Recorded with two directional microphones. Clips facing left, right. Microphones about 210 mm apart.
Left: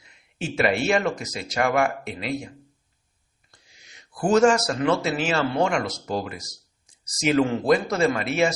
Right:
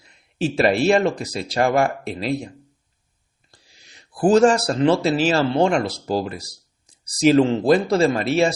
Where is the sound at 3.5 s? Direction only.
35° right (ahead or behind).